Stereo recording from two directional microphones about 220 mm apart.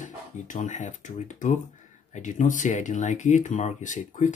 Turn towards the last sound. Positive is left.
turn(degrees=35)  # may be behind; listen again after turning